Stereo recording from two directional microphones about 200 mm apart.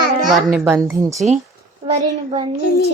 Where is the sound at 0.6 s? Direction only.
10° right (ahead or behind).